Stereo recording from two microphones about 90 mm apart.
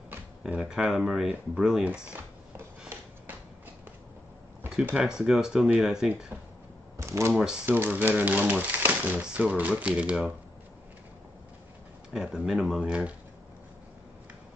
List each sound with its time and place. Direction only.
0.4 s speech: 10° right (ahead or behind)
4.6 s speech: 10° right (ahead or behind)
7.0 s a sound: 30° right (ahead or behind)
7.6 s speech: 20° right (ahead or behind)
12.1 s speech: 10° right (ahead or behind)